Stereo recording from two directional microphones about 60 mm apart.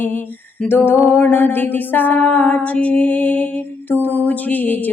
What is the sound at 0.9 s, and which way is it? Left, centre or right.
Music, left.